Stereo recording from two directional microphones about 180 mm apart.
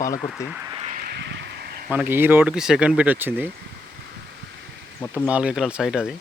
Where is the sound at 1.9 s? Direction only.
10° right (ahead or behind).